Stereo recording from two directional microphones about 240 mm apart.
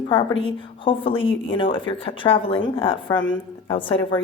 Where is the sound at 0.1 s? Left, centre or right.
Left.